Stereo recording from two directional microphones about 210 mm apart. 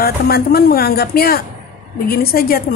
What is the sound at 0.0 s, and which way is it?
A woman's voice, 45° left (ahead or behind).